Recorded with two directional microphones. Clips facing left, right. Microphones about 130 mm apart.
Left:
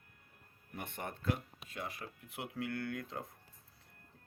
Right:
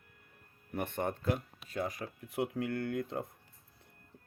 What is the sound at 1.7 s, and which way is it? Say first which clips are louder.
Speech: right 8 dB; 40° right (ahead or behind).